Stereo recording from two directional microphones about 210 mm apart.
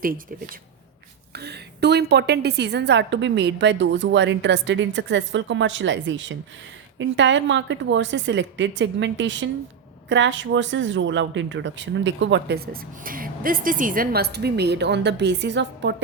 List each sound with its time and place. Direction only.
0.0 s speech: 45° right (ahead or behind)